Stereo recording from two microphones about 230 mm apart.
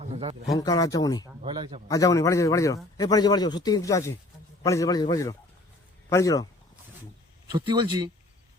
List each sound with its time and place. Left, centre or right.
0.0 s a sound: right
0.6 s speech: centre
1.4 s a man's voice: right
1.9 s speech: centre
7.5 s speech: centre